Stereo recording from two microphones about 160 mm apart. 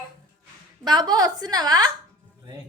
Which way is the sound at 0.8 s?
25° right (ahead or behind).